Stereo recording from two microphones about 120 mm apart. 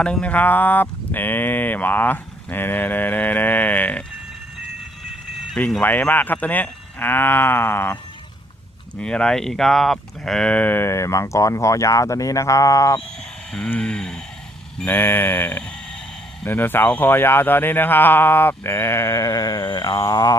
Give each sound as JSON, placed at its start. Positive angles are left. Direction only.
{"t": 0.0, "sound": "speech", "side_deg": 10}
{"t": 5.5, "sound": "speech", "side_deg": 10}
{"t": 9.0, "sound": "speech", "side_deg": 5}
{"t": 13.5, "sound": "a sound", "side_deg": 5}
{"t": 14.8, "sound": "speech", "side_deg": 15}